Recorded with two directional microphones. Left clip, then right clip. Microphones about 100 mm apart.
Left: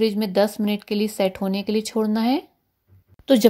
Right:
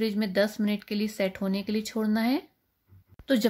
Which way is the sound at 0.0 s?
30° left (ahead or behind).